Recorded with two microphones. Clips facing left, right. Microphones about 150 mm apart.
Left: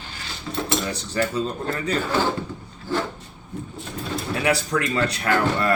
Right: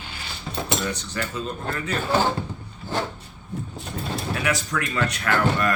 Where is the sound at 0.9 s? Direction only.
30° left (ahead or behind).